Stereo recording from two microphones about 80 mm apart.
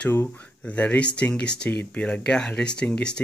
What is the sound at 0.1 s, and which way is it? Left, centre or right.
Speech, left.